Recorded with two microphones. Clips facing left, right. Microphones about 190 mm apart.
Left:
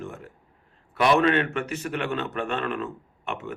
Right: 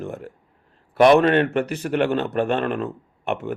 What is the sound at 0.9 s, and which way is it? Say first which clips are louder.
Speech: right 6 dB; 50° right (ahead or behind).